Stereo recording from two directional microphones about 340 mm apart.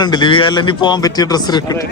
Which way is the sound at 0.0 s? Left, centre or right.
Centre.